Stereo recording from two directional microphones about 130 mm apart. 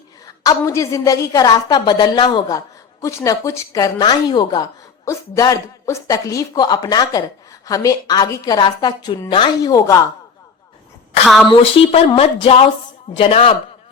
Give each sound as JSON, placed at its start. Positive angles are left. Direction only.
{"t": 0.4, "sound": "a woman's voice", "side_deg": 25}
{"t": 11.3, "sound": "a woman's voice", "side_deg": 0}
{"t": 11.9, "sound": "a sound", "side_deg": 50}